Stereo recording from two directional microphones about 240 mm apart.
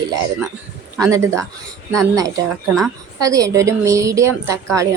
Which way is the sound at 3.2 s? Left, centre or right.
Centre.